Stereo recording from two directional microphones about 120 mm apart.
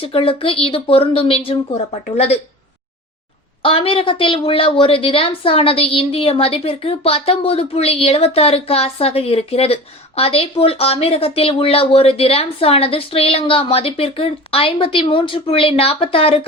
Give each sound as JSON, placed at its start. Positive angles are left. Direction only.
{"t": 0.0, "sound": "speech", "side_deg": 50}
{"t": 3.6, "sound": "speech", "side_deg": 50}